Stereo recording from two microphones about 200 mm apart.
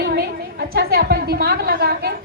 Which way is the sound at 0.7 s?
50° right (ahead or behind).